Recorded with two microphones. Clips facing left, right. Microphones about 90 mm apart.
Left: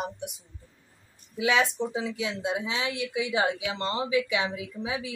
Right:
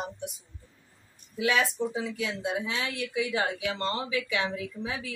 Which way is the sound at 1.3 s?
20° left (ahead or behind).